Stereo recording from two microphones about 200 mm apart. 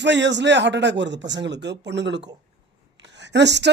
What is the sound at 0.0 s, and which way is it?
A woman's voice, 60° right (ahead or behind).